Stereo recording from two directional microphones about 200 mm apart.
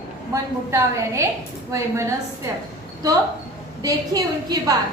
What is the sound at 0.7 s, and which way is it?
A woman's voice, 15° right (ahead or behind).